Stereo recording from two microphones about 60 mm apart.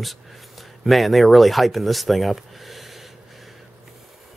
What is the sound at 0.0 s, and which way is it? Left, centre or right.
Speech, centre.